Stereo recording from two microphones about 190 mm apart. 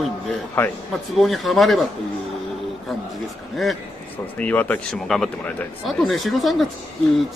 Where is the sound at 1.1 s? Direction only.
Centre (ahead or behind).